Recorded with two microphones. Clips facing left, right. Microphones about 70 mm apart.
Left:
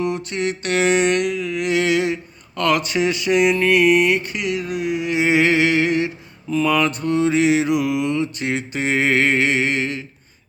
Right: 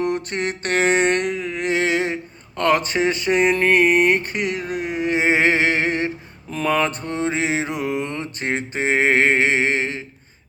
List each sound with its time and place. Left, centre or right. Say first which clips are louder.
0.0 s mantra: even; right